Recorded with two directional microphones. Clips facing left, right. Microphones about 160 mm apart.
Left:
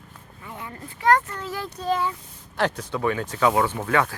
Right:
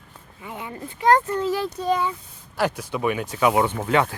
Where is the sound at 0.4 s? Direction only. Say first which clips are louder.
Right 4 dB; 20° right (ahead or behind).